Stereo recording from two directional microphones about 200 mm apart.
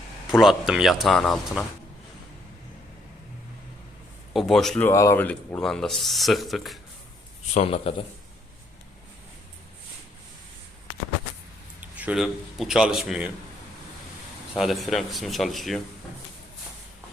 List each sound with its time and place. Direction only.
0.3 s speech: centre (ahead or behind)
4.4 s speech: centre (ahead or behind)
7.5 s a man's voice: 30° left (ahead or behind)
11.8 s a man's voice: 5° right (ahead or behind)
14.5 s speech: centre (ahead or behind)